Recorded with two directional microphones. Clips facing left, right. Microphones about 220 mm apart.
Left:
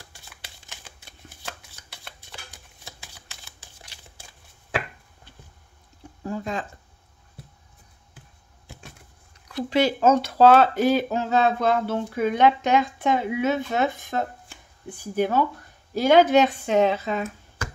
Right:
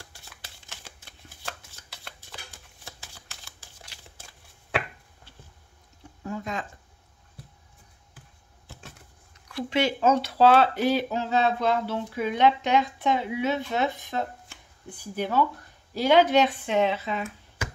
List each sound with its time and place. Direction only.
6.2 s speech: 30° left (ahead or behind)
9.7 s speech: 40° left (ahead or behind)